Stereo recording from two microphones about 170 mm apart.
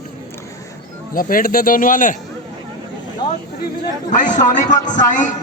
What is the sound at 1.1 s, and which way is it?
Speech, 55° left (ahead or behind).